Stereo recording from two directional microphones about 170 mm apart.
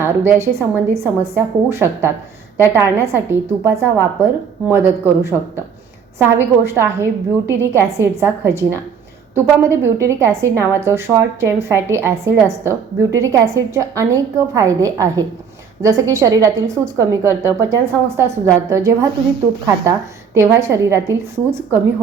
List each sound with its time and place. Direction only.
0.0 s a woman's voice: 15° right (ahead or behind)
6.4 s a woman's voice: 15° right (ahead or behind)